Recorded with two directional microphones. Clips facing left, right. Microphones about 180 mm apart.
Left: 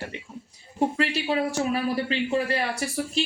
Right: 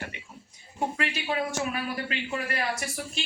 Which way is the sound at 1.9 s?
30° left (ahead or behind).